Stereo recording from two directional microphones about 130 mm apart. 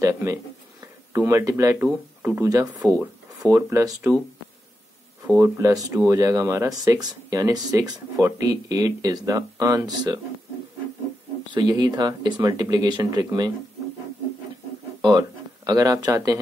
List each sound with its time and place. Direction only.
0.0 s speech: 20° right (ahead or behind)
2.5 s speech: 30° right (ahead or behind)
5.2 s speech: 20° right (ahead or behind)
11.5 s speech: 35° right (ahead or behind)
15.0 s speech: 35° right (ahead or behind)